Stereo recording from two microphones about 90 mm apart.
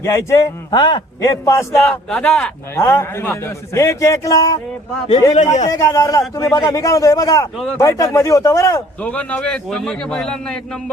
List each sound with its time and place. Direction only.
0.0 s a man's voice: 30° left (ahead or behind)
0.7 s a man's voice: 55° left (ahead or behind)
1.2 s a man's voice: 35° left (ahead or behind)
1.9 s a man's voice: 10° left (ahead or behind)
2.7 s a man's voice: 30° left (ahead or behind)
9.0 s a man's voice: 15° left (ahead or behind)